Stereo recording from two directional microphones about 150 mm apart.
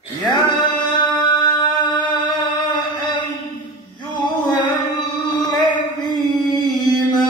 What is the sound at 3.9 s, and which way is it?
Male singing, 30° left (ahead or behind).